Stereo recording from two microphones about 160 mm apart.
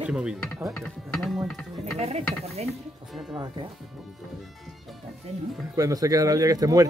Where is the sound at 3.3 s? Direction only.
25° right (ahead or behind).